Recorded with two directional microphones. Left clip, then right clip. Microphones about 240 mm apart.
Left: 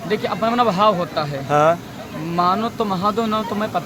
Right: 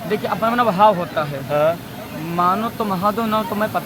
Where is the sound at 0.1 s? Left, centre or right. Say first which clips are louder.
Even; centre.